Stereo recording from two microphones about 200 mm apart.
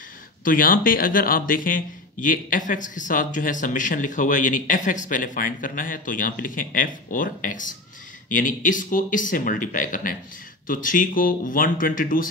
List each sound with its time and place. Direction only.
0.4 s speech: 45° left (ahead or behind)